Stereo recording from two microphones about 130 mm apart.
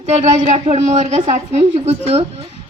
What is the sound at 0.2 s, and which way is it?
Speech, 55° right (ahead or behind).